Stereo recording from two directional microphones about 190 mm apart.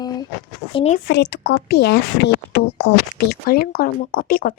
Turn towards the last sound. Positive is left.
turn(degrees=50)  # may be behind; listen again after turning